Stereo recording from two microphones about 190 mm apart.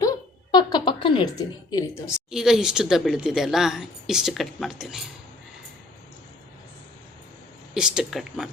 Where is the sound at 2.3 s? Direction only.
5° right (ahead or behind).